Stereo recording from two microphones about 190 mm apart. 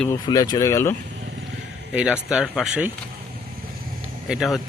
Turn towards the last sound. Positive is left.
turn(degrees=0)  # may be behind; listen again after turning